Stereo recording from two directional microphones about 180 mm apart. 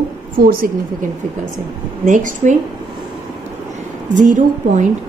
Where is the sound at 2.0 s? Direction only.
45° right (ahead or behind).